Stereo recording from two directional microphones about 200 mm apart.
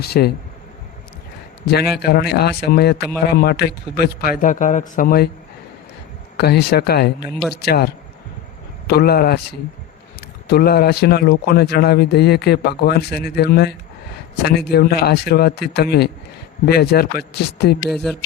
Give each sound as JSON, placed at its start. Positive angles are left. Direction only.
{"t": 0.0, "sound": "speech", "side_deg": 50}
{"t": 2.0, "sound": "speech", "side_deg": 50}
{"t": 6.3, "sound": "speech", "side_deg": 55}
{"t": 7.3, "sound": "speech", "side_deg": 0}
{"t": 7.5, "sound": "speech", "side_deg": 55}
{"t": 8.9, "sound": "speech", "side_deg": 50}